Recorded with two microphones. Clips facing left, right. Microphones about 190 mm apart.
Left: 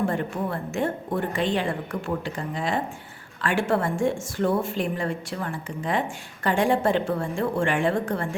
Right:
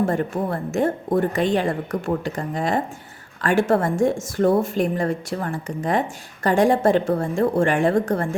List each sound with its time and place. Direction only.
0.1 s a woman's voice: 40° right (ahead or behind)